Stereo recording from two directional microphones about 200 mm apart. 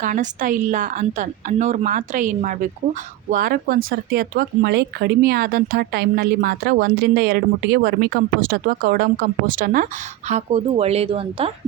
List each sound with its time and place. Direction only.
0.0 s a woman's voice: 40° right (ahead or behind)
10.2 s a woman's voice: 30° right (ahead or behind)